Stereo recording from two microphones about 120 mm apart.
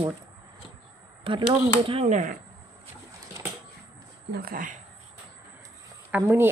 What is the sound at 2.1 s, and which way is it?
Speech, 90° right.